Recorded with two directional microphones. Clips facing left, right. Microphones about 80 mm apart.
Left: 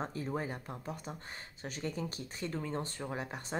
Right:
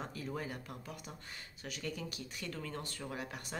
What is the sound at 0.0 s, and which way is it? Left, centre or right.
Speech, left.